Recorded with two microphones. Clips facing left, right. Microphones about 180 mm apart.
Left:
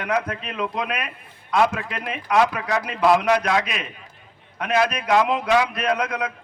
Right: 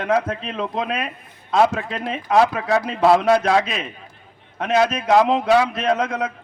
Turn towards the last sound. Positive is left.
turn(degrees=-25)  # may be behind; listen again after turning